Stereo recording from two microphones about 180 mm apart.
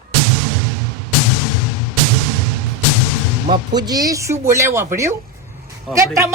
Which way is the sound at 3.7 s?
20° right (ahead or behind).